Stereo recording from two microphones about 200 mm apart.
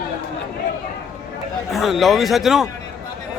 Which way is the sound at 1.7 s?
Centre (ahead or behind).